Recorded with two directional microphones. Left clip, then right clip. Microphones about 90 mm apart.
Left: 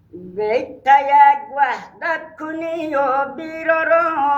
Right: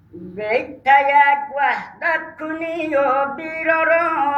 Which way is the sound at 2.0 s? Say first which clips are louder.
Right 1 dB; 30° left (ahead or behind).